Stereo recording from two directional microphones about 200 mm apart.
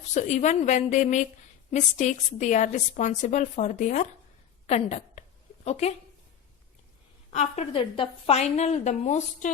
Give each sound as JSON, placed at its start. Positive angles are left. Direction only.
{"t": 0.1, "sound": "a woman's voice", "side_deg": 35}
{"t": 7.3, "sound": "a woman's voice", "side_deg": 30}